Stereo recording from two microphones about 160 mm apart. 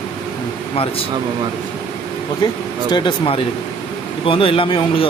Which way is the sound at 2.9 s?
30° left (ahead or behind).